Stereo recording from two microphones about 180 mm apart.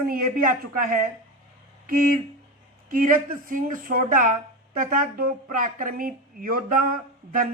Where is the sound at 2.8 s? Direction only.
50° right (ahead or behind).